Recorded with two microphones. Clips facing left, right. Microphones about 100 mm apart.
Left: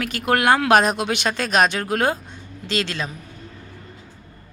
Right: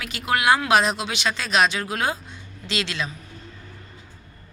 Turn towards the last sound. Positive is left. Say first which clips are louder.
# left 3 dB
turn(degrees=45)  # may be behind; listen again after turning